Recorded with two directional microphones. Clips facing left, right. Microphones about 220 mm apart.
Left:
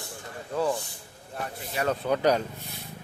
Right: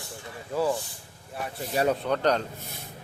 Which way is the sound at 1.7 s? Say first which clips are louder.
Right 4 dB; 40° right (ahead or behind).